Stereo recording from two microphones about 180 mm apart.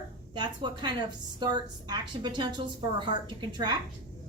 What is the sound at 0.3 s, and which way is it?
A woman's voice, 25° right (ahead or behind).